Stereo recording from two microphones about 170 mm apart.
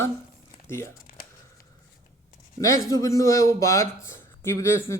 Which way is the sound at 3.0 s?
20° left (ahead or behind).